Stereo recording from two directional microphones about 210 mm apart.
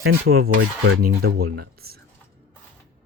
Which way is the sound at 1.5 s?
45° right (ahead or behind).